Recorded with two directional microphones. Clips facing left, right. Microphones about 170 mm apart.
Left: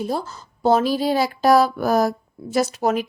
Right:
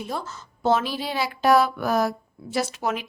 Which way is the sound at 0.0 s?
35° left (ahead or behind).